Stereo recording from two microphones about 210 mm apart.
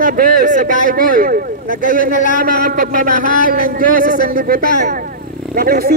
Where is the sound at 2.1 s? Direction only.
40° left (ahead or behind).